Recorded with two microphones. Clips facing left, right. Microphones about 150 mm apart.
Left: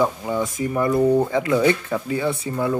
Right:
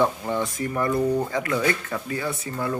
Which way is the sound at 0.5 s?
20° left (ahead or behind).